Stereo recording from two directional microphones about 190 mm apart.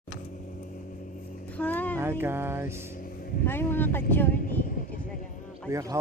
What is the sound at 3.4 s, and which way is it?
Speech, 10° left (ahead or behind).